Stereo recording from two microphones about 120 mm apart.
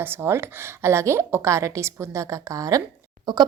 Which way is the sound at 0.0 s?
20° right (ahead or behind).